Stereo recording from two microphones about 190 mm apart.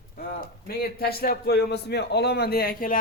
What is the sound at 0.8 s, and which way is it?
A man's voice, 55° left (ahead or behind).